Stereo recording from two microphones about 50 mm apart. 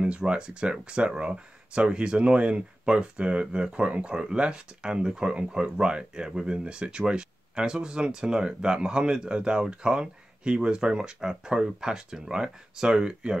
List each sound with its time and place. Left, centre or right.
0.0 s speech: centre